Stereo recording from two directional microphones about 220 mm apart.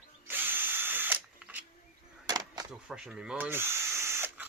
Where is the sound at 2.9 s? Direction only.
5° right (ahead or behind).